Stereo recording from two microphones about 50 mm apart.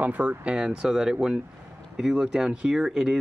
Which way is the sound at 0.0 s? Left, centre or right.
Right.